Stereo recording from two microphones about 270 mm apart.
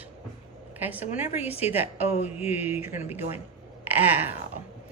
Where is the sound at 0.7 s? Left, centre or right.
Centre.